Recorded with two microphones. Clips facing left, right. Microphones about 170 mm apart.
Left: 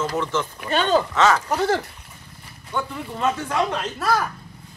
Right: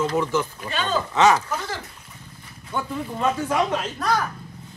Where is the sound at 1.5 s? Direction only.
65° left (ahead or behind).